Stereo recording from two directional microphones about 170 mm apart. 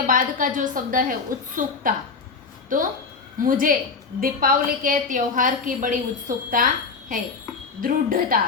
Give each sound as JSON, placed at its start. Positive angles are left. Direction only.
{"t": 0.1, "sound": "a woman's voice", "side_deg": -50}